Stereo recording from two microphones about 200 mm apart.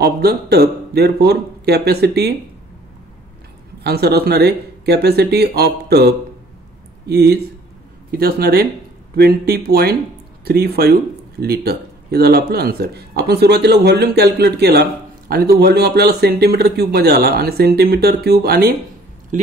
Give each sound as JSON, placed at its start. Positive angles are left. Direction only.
{"t": 0.0, "sound": "speech", "side_deg": -55}
{"t": 3.8, "sound": "speech", "side_deg": -55}
{"t": 19.3, "sound": "a sound", "side_deg": -40}